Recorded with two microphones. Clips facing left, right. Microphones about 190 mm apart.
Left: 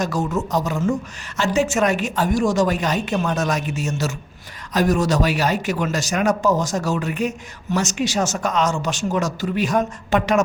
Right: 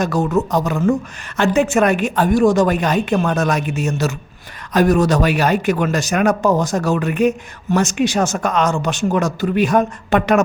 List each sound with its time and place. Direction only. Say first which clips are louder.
0.0 s a man's voice: right 5 dB; 60° right (ahead or behind)